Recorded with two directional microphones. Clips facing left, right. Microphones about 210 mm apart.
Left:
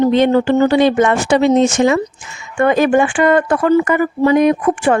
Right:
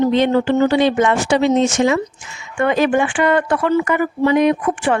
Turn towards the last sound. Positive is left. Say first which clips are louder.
# left 3 dB
turn(degrees=45)  # may be behind; listen again after turning